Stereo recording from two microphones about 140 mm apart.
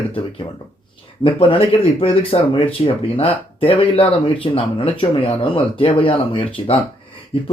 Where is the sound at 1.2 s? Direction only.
40° left (ahead or behind).